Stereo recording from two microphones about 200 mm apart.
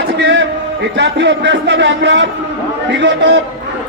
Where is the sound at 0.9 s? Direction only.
60° right (ahead or behind).